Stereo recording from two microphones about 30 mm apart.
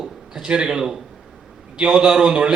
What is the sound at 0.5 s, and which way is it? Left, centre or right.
Speech, right.